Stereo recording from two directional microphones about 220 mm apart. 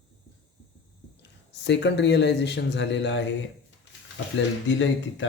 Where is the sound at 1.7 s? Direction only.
55° left (ahead or behind).